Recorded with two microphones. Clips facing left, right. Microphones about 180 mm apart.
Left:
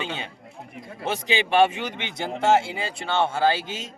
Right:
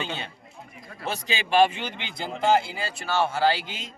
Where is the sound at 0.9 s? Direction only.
20° left (ahead or behind).